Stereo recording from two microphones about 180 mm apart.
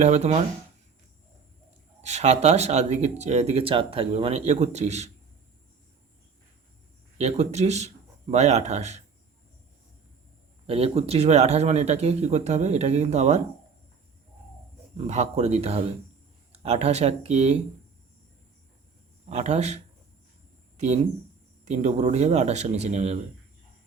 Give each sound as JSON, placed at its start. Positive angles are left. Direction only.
{"t": 0.0, "sound": "speech", "side_deg": -40}
{"t": 2.0, "sound": "speech", "side_deg": -40}
{"t": 7.2, "sound": "speech", "side_deg": -35}
{"t": 10.7, "sound": "speech", "side_deg": -35}
{"t": 14.9, "sound": "speech", "side_deg": -40}
{"t": 19.2, "sound": "speech", "side_deg": -40}